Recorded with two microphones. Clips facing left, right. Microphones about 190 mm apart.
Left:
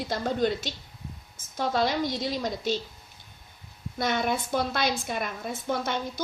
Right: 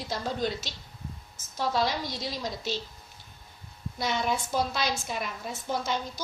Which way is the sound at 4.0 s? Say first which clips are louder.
Left 2 dB; 55° left (ahead or behind).